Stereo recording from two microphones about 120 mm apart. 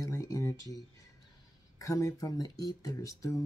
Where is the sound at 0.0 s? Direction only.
25° left (ahead or behind).